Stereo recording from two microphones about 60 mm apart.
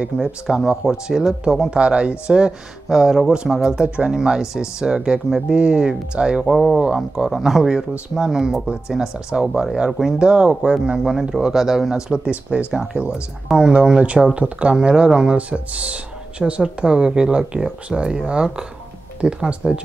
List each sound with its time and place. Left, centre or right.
0.0 s speech: centre
3.8 s speech: right
6.4 s speech: centre
10.1 s speech: centre